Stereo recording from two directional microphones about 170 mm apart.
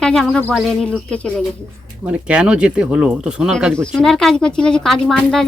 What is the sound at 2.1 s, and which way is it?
Speech, 5° right (ahead or behind).